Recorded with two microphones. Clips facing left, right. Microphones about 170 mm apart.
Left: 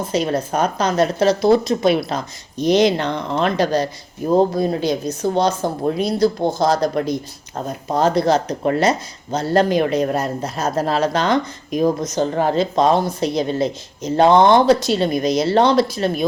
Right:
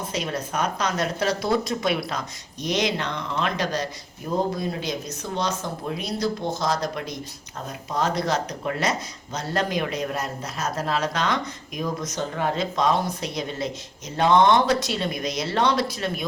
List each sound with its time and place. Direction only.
0.0 s speech: 30° left (ahead or behind)